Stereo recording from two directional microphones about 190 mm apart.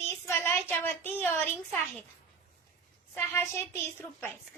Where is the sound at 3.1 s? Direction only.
15° left (ahead or behind).